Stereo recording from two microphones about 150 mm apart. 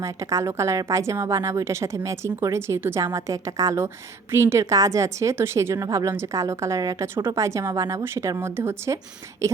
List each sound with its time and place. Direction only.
0.0 s a woman's voice: 20° right (ahead or behind)